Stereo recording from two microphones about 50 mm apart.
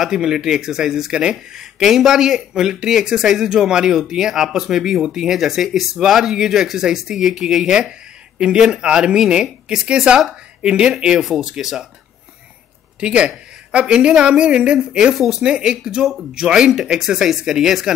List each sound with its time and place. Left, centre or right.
0.0 s speech: centre
13.0 s a woman's voice: right
15.1 s speech: centre
15.4 s speech: centre